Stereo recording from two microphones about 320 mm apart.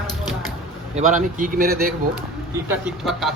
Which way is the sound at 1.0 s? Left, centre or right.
Right.